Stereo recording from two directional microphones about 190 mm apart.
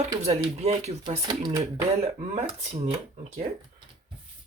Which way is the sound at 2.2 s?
40° right (ahead or behind).